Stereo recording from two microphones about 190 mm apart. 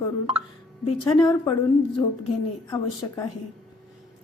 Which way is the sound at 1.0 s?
20° left (ahead or behind).